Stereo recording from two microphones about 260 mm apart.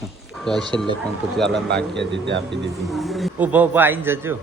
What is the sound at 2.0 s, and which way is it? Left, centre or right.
Speech, right.